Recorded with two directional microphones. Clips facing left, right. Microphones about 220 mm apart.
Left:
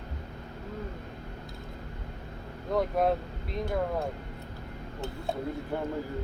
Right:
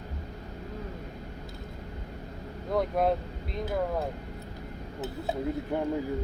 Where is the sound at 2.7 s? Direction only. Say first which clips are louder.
Even; centre (ahead or behind).